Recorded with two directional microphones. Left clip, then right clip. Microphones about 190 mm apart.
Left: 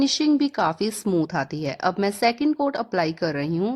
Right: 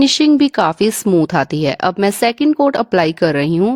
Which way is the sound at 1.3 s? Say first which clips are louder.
Right 11 dB; 50° right (ahead or behind).